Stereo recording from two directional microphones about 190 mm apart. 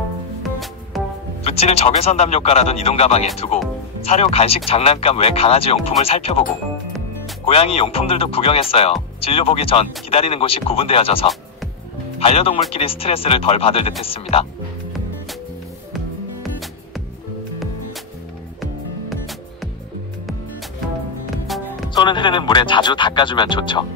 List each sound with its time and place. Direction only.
0.4 s music: centre (ahead or behind)
1.4 s speech: 35° left (ahead or behind)
7.4 s speech: 30° left (ahead or behind)
18.6 s music: centre (ahead or behind)
21.5 s music: centre (ahead or behind)
21.9 s speech: 25° left (ahead or behind)